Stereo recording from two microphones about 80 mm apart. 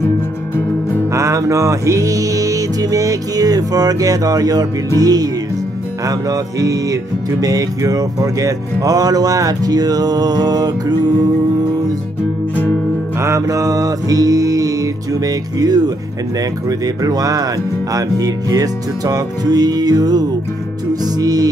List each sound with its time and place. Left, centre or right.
1.1 s music: right
13.2 s music: right